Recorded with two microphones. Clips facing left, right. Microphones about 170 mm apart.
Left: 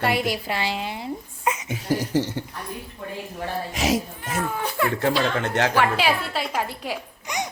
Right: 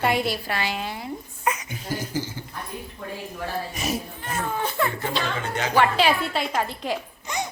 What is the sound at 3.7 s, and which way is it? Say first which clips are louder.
Speech: left 5 dB; 90° left.